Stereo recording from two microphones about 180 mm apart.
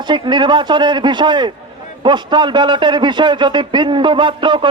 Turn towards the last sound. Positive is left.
turn(degrees=-25)  # may be behind; listen again after turning